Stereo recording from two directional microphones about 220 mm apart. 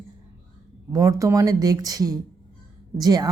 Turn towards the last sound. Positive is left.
turn(degrees=-15)  # may be behind; listen again after turning